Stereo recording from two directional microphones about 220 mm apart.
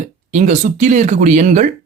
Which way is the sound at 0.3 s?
30° right (ahead or behind).